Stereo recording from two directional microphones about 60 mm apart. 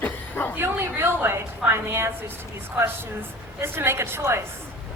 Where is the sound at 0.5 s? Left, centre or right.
Right.